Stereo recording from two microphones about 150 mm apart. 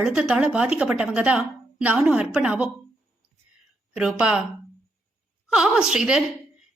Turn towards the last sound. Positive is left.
turn(degrees=-5)  # may be behind; listen again after turning